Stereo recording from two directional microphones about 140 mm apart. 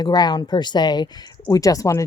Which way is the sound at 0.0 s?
30° left (ahead or behind).